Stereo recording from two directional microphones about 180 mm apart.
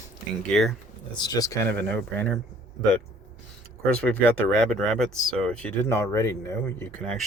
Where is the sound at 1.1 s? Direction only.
20° left (ahead or behind).